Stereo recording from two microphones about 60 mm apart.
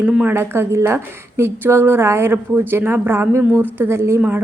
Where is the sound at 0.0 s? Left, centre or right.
Centre.